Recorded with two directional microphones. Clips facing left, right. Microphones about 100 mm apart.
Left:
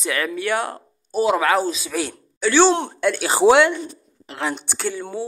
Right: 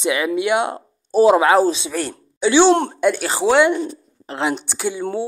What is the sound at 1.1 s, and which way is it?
Speech, 35° right (ahead or behind).